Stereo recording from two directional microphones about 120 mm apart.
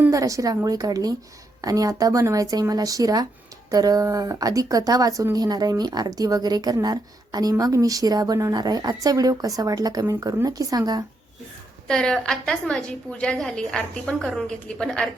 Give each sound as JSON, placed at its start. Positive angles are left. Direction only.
{"t": 0.1, "sound": "a woman's voice", "side_deg": -25}
{"t": 11.9, "sound": "a woman's voice", "side_deg": 5}